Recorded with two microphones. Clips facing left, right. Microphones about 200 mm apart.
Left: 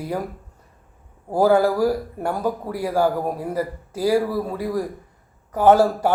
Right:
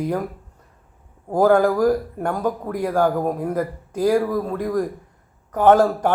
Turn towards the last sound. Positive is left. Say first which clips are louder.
# even
turn(degrees=10)  # may be behind; listen again after turning